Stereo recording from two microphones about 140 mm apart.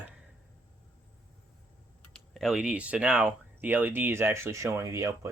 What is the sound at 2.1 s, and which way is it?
Speech, centre (ahead or behind).